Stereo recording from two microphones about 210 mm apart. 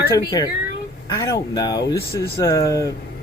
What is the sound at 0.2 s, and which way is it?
Speech, 20° left (ahead or behind).